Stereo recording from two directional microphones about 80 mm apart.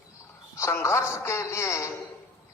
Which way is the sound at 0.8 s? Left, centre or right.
Left.